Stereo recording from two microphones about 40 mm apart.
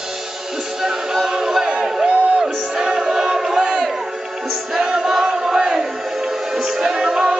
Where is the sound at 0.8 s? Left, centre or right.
Centre.